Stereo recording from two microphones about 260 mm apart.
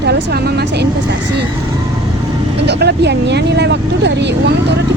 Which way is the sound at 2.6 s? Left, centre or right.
Right.